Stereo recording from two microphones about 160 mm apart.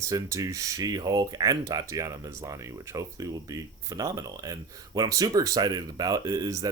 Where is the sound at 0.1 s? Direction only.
20° right (ahead or behind).